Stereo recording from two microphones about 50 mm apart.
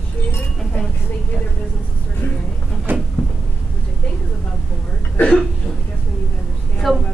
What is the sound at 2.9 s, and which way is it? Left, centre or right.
Cupboard open or close, right.